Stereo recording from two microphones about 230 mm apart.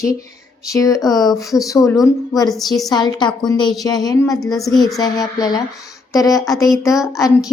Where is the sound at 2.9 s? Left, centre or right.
Centre.